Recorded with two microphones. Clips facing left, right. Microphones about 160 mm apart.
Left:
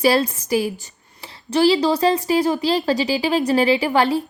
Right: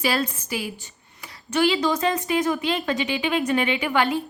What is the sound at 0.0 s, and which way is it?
Speech, 35° left (ahead or behind).